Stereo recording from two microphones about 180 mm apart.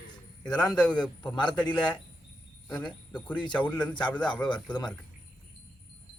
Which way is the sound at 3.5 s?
10° left (ahead or behind).